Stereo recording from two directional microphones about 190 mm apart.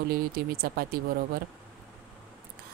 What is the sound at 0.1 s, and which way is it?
Speech, 50° right (ahead or behind).